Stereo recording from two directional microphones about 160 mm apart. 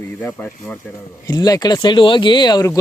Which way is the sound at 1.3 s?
25° left (ahead or behind).